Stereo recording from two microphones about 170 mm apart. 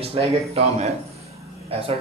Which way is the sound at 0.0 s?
35° right (ahead or behind).